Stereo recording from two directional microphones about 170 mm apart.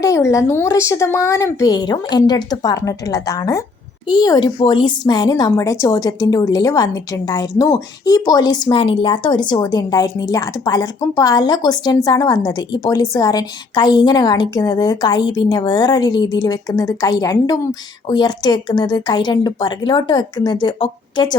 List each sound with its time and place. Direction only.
0.0 s speech: 20° left (ahead or behind)